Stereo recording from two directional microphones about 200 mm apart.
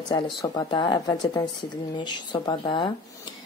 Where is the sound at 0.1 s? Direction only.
20° left (ahead or behind).